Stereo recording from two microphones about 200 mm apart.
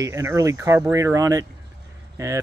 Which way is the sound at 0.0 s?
15° right (ahead or behind).